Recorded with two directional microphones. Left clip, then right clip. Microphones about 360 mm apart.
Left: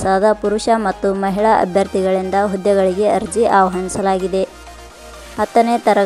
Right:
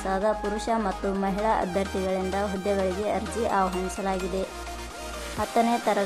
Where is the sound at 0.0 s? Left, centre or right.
Centre.